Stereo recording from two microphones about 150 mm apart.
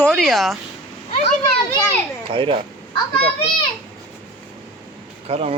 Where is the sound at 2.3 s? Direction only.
35° right (ahead or behind).